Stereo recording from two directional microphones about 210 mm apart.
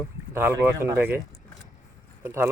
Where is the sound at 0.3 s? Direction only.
10° right (ahead or behind).